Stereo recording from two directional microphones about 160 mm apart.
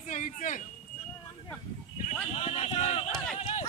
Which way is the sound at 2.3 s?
40° left (ahead or behind).